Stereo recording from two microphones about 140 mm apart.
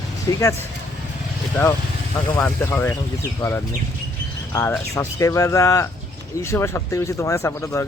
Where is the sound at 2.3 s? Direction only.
20° left (ahead or behind).